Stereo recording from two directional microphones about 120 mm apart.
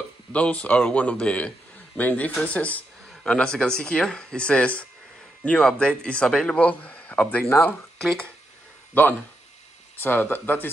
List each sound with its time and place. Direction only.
0.3 s speech: 10° left (ahead or behind)
9.0 s speech: 15° left (ahead or behind)